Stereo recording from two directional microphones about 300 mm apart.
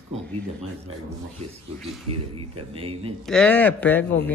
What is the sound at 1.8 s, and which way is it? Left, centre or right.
Speech, centre.